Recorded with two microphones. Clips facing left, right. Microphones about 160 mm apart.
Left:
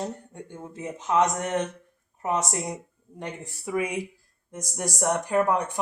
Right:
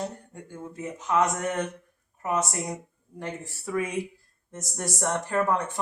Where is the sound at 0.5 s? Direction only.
20° left (ahead or behind).